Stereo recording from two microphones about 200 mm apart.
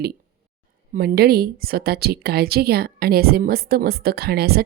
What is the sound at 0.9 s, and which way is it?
A woman's voice, 50° right (ahead or behind).